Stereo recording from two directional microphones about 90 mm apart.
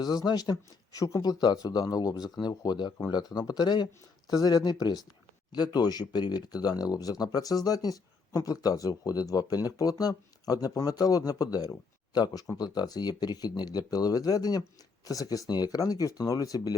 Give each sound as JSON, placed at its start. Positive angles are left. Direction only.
{"t": 0.0, "sound": "speech", "side_deg": 50}
{"t": 0.5, "sound": "speech", "side_deg": 40}